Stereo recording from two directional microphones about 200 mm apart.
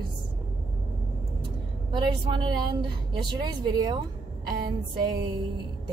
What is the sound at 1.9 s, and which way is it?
Speech, 25° right (ahead or behind).